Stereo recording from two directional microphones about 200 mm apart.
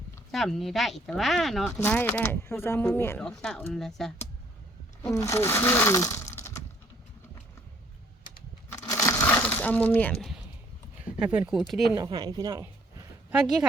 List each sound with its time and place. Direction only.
0.3 s speech: centre (ahead or behind)
5.0 s speech: 15° left (ahead or behind)
8.7 s crushing: 10° left (ahead or behind)
11.2 s speech: 5° right (ahead or behind)
11.9 s speech: 20° right (ahead or behind)
13.3 s speech: 5° right (ahead or behind)